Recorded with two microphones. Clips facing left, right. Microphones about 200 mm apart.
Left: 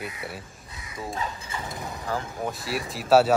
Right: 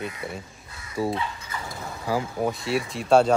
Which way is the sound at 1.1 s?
40° left (ahead or behind).